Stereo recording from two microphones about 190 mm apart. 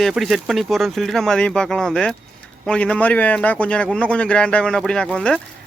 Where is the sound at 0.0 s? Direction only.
Centre (ahead or behind).